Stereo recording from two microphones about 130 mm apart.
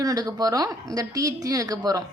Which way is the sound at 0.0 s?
30° right (ahead or behind).